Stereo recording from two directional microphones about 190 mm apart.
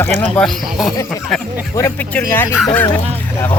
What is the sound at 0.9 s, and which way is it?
Speech, 15° left (ahead or behind).